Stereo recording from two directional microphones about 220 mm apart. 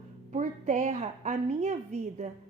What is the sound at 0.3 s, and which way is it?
A woman's voice, 30° right (ahead or behind).